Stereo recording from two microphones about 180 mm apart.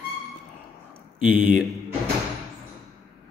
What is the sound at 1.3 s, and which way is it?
Speech, 10° right (ahead or behind).